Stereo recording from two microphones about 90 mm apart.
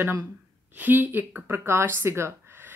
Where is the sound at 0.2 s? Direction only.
20° right (ahead or behind).